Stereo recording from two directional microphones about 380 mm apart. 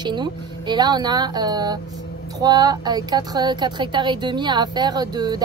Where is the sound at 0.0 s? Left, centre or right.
Centre.